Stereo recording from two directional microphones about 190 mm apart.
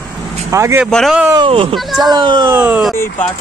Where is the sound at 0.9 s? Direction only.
Centre (ahead or behind).